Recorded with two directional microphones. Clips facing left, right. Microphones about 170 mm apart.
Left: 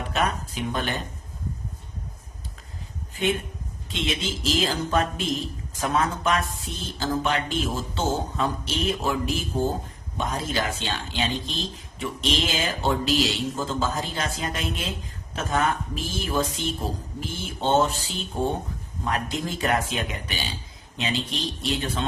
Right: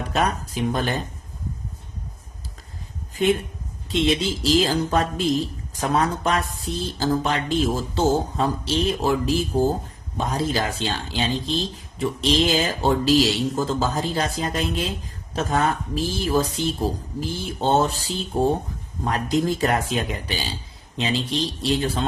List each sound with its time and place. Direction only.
0.1 s speech: 40° right (ahead or behind)
3.8 s speech: 35° right (ahead or behind)